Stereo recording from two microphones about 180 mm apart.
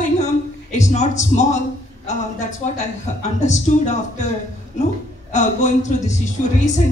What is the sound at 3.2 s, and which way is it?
A woman's voice, 40° left (ahead or behind).